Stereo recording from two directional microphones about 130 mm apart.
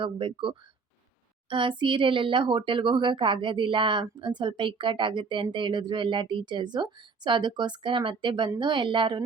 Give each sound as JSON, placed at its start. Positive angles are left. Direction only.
{"t": 0.0, "sound": "a woman's voice", "side_deg": -40}